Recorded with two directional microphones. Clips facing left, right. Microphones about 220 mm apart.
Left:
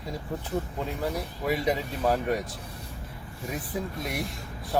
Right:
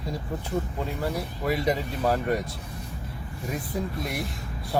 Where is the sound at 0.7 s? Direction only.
5° right (ahead or behind).